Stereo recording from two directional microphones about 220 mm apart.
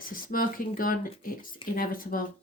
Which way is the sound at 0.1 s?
40° left (ahead or behind).